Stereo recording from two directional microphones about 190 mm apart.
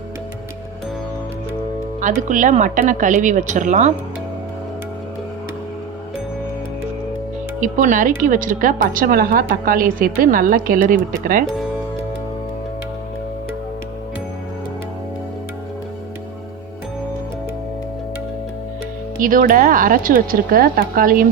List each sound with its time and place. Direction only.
2.3 s speech: 40° right (ahead or behind)
7.6 s a woman's voice: 45° right (ahead or behind)
19.2 s a woman's voice: 45° right (ahead or behind)